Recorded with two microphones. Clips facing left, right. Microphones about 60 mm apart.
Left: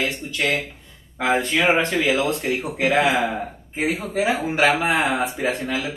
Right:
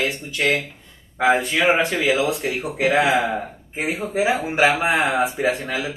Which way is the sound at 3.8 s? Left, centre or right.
Right.